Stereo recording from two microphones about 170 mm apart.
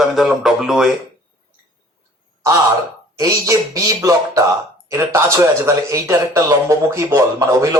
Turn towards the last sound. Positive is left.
turn(degrees=-20)  # may be behind; listen again after turning